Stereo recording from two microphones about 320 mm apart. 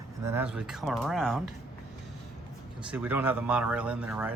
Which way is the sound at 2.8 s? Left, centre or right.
Centre.